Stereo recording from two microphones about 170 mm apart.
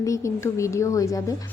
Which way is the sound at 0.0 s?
15° left (ahead or behind).